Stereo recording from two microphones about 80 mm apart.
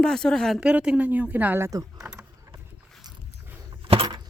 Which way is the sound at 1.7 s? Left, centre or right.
Right.